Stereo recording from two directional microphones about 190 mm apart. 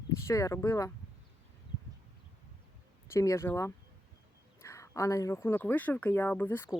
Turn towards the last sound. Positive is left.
turn(degrees=10)  # may be behind; listen again after turning